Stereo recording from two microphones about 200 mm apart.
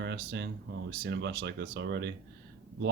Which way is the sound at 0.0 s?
60° right (ahead or behind).